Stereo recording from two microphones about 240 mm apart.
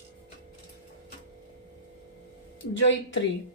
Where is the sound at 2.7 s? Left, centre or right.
Left.